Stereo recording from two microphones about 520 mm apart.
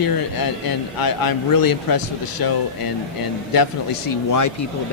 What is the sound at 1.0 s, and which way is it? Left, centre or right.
Speech, left.